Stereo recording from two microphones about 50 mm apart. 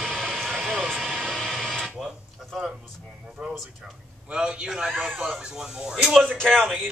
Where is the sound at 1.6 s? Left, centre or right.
Centre.